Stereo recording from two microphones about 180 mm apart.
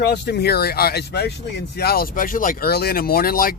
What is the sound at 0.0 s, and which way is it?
Speech, 65° left (ahead or behind).